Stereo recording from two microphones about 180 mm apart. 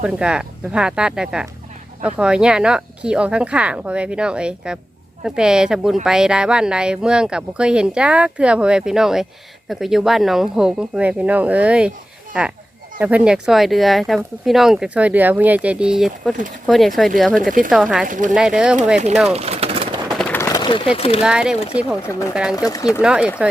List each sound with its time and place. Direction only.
0.0 s speech: 5° right (ahead or behind)
18.1 s speech: 45° right (ahead or behind)
18.3 s speech: 5° right (ahead or behind)
19.3 s bird: 35° right (ahead or behind)
20.1 s a sound: 10° left (ahead or behind)
20.5 s a sound: 25° left (ahead or behind)
20.9 s speech: 30° left (ahead or behind)
21.2 s speech: 5° right (ahead or behind)
22.5 s speech: 20° left (ahead or behind)
22.9 s speech: 5° right (ahead or behind)